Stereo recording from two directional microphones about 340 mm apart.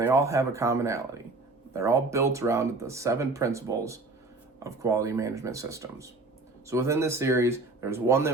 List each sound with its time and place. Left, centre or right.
0.0 s speech: centre